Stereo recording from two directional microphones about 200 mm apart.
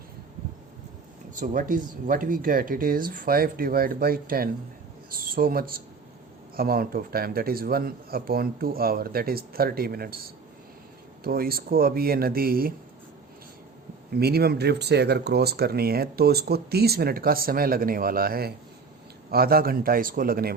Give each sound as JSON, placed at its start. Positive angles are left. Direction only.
{"t": 1.4, "sound": "speech", "side_deg": -45}
{"t": 14.1, "sound": "speech", "side_deg": -50}